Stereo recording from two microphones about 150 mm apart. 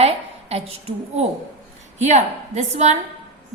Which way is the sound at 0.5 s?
45° right (ahead or behind).